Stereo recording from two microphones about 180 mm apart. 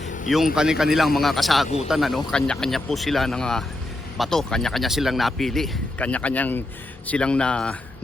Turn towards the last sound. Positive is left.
turn(degrees=5)  # may be behind; listen again after turning